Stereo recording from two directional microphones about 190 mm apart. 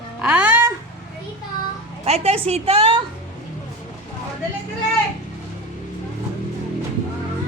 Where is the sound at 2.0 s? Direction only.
30° right (ahead or behind).